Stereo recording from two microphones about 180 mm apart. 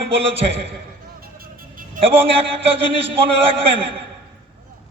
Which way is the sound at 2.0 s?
30° right (ahead or behind).